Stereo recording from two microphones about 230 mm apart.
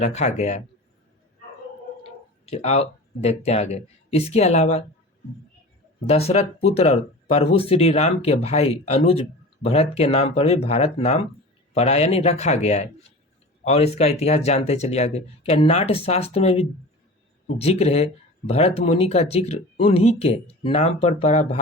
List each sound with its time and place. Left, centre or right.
0.0 s speech: left
2.5 s speech: left
6.1 s speech: left